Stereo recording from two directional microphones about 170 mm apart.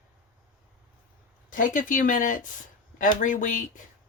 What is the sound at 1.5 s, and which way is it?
Speech, 50° left (ahead or behind).